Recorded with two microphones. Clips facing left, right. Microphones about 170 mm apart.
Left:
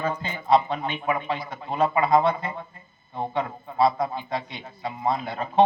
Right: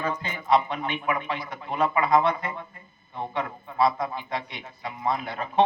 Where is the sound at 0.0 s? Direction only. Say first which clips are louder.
Left 2 dB; 30° left (ahead or behind).